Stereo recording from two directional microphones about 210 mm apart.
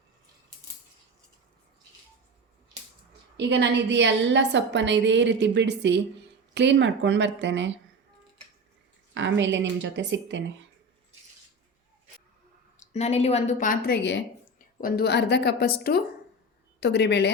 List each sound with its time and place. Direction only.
3.3 s a woman's voice: 55° right (ahead or behind)
9.1 s a woman's voice: 60° right (ahead or behind)
12.9 s a woman's voice: 30° left (ahead or behind); by 14.3 s 55° left (ahead or behind)
14.8 s a woman's voice: 45° left (ahead or behind)